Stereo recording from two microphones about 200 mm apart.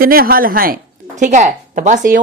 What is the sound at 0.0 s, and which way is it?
A woman's voice, 45° right (ahead or behind).